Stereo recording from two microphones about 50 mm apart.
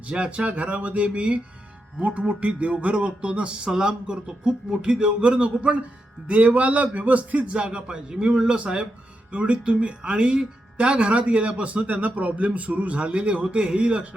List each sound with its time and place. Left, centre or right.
0.0 s speech: right
7.6 s speech: centre